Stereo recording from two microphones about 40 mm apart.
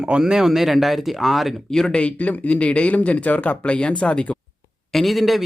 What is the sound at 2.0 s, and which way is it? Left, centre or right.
Speech, left.